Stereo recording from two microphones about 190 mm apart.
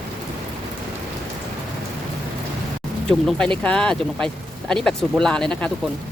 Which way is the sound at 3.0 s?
5° left (ahead or behind).